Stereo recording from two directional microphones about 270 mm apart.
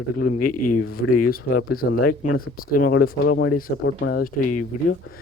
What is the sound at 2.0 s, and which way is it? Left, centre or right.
Speech, left.